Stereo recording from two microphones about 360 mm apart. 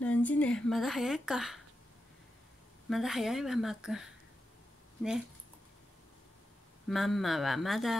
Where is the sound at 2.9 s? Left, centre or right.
Centre.